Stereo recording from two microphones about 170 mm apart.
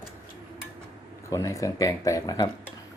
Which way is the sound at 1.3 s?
20° left (ahead or behind).